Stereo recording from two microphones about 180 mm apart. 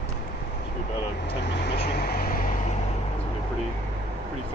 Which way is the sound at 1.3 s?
65° left (ahead or behind).